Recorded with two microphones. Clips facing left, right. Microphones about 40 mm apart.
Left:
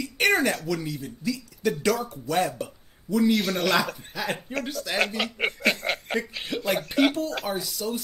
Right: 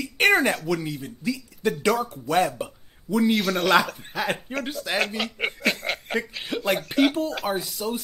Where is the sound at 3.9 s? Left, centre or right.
Centre.